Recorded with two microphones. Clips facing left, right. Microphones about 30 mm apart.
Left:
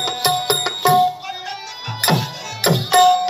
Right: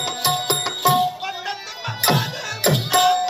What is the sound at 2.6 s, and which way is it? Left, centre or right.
Music, left.